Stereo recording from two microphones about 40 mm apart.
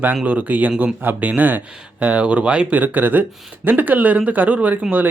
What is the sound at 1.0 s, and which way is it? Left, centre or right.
Speech, right.